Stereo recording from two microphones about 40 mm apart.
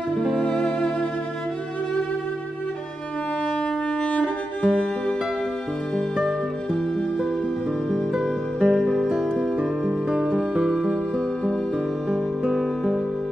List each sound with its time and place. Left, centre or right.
0.4 s music: left
4.0 s music: left
6.2 s music: centre
8.1 s music: centre
9.6 s music: right
10.3 s music: centre
12.1 s music: centre